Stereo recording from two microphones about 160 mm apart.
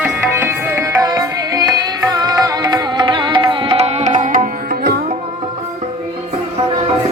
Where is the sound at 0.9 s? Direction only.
20° right (ahead or behind); by 4.9 s 65° right (ahead or behind).